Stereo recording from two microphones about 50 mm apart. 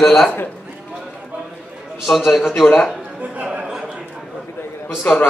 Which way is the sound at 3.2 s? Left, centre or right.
Right.